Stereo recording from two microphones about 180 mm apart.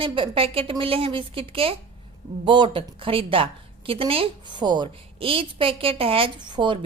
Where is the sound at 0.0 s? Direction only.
30° right (ahead or behind).